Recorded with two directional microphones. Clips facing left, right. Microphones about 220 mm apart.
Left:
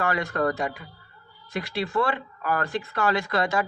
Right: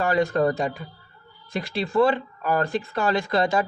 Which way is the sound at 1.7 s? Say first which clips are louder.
Right 6 dB; 25° right (ahead or behind).